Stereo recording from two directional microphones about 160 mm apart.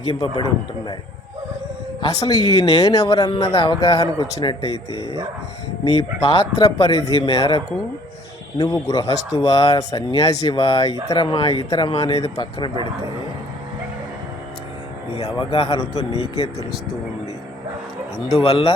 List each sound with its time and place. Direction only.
0.0 s speech: 35° left (ahead or behind)
2.0 s speech: 30° left (ahead or behind)
4.9 s speech: 25° right (ahead or behind)
5.9 s speech: 35° left (ahead or behind)
15.1 s speech: 35° left (ahead or behind)
18.4 s speech: 35° left (ahead or behind)